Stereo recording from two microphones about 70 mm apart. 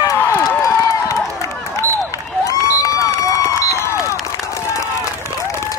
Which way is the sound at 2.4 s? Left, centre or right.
Left.